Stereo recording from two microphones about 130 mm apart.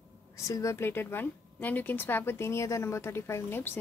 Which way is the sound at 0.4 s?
25° left (ahead or behind).